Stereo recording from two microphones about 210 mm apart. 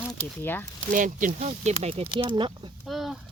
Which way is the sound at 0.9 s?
40° right (ahead or behind).